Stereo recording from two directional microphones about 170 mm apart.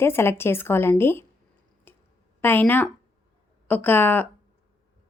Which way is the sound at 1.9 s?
10° left (ahead or behind).